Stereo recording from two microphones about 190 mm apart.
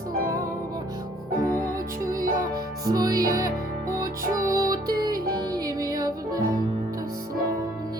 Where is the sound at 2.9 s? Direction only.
20° right (ahead or behind).